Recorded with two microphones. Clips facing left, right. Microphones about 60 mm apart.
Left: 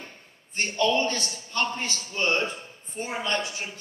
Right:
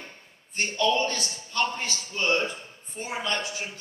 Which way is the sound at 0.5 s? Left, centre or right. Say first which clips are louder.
Left 1 dB; left.